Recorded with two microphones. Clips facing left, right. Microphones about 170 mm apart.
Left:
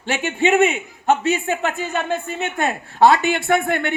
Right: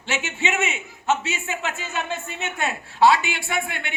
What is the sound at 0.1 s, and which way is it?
A man's voice, 55° left (ahead or behind).